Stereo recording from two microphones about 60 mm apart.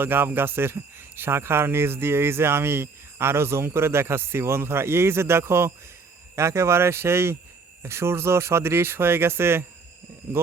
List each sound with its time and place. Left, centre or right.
0.0 s speech: right